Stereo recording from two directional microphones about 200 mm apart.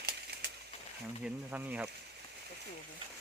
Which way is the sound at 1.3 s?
10° right (ahead or behind).